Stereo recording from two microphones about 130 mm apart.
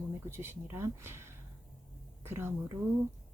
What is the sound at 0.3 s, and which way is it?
A woman's voice, 20° right (ahead or behind).